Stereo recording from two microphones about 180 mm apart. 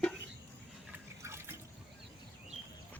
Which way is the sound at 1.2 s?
15° right (ahead or behind).